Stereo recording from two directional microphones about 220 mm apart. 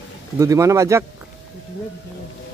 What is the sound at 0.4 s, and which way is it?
Speech, 15° right (ahead or behind).